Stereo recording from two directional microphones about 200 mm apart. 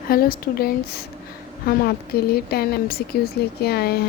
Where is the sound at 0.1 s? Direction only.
45° left (ahead or behind).